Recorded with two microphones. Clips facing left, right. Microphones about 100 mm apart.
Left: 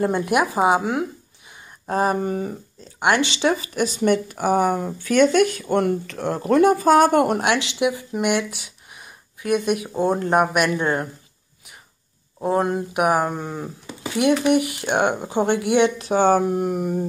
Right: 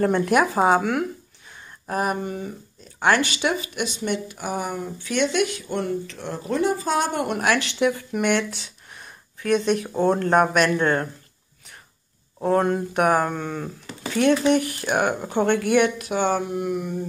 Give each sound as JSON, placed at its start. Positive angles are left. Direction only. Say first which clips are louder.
{"t": 0.0, "sound": "speech", "louder": "right 1 dB", "side_deg": 10}
{"t": 1.9, "sound": "speech", "louder": "left 4 dB", "side_deg": 30}
{"t": 3.0, "sound": "speech", "louder": "left 1 dB", "side_deg": 20}
{"t": 7.3, "sound": "speech", "louder": "left 1 dB", "side_deg": 20}
{"t": 12.4, "sound": "speech", "louder": "even", "side_deg": 10}
{"t": 16.0, "sound": "speech", "louder": "left 6 dB", "side_deg": 35}